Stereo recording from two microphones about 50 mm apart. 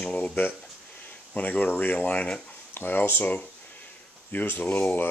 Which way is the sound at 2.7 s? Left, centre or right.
Left.